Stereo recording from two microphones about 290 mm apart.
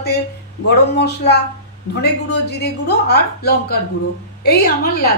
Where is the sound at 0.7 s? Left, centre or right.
Left.